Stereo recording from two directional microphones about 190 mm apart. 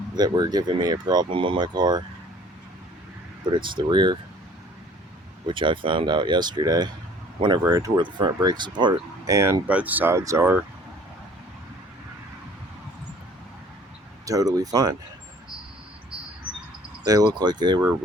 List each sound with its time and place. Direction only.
0.2 s speech: 20° right (ahead or behind)
3.5 s speech: 25° right (ahead or behind)
5.5 s speech: 25° right (ahead or behind)
14.3 s speech: 20° right (ahead or behind)
17.0 s speech: 20° right (ahead or behind)